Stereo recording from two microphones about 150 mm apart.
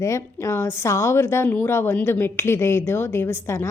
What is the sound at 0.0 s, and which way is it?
A woman's voice, 20° left (ahead or behind).